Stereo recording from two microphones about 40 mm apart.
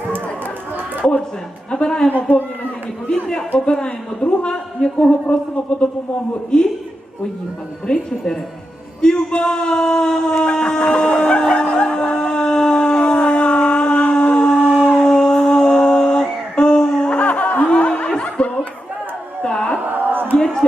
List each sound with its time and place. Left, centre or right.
1.7 s speech: left
2.0 s a man's voice: left
3.1 s speech: centre
6.5 s speech: left
7.9 s speech: left
11.6 s howl: left
14.1 s a sound: left
17.2 s music: left
17.7 s snicker: left
19.4 s carnatic music: left
19.8 s a sound: right
20.3 s a sound: centre